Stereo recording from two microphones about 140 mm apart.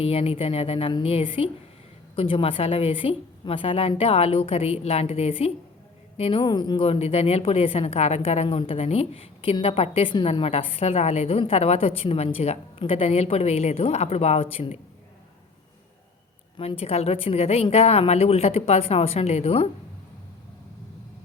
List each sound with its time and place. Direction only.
0.0 s a woman's voice: 45° left (ahead or behind)
16.6 s a woman's voice: 45° left (ahead or behind)